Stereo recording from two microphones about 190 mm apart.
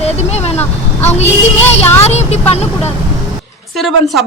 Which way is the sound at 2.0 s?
35° left (ahead or behind).